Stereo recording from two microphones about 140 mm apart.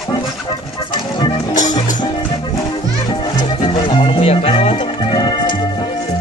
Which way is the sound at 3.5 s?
35° left (ahead or behind).